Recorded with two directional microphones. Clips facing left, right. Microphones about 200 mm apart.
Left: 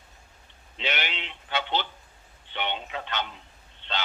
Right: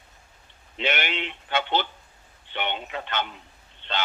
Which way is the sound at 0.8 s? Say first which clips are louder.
Right 5 dB; 55° right (ahead or behind).